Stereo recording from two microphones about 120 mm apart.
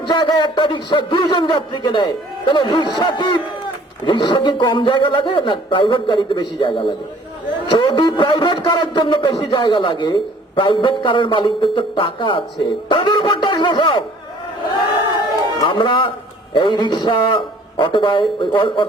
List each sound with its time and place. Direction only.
0.0 s a man's voice: 40° left (ahead or behind)
15.6 s speech: 45° left (ahead or behind)